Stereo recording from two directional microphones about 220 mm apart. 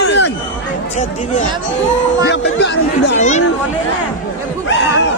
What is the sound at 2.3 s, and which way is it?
Speech, 50° left (ahead or behind).